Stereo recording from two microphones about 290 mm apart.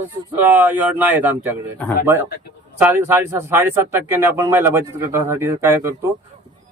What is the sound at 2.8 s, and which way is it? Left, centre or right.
Speech, centre.